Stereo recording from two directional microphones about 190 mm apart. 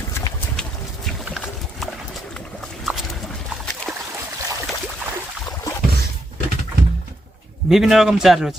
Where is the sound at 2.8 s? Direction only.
Centre (ahead or behind).